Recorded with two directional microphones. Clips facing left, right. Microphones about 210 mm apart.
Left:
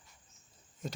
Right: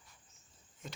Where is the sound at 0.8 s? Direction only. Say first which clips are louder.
Left 8 dB; 40° left (ahead or behind).